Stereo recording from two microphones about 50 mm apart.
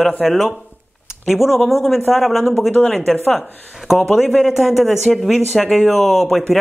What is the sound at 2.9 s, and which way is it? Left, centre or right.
Speech, centre.